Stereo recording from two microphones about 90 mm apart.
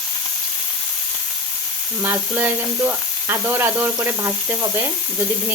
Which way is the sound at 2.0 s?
20° right (ahead or behind).